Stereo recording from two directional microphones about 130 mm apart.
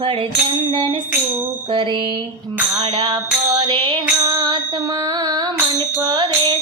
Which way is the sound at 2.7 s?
35° right (ahead or behind).